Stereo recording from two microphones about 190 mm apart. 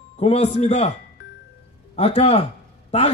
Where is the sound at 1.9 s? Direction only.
35° left (ahead or behind).